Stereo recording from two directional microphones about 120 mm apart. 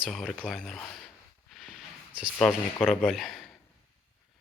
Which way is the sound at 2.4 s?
5° left (ahead or behind).